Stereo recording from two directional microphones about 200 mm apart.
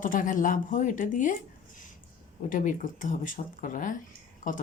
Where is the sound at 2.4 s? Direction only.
40° left (ahead or behind).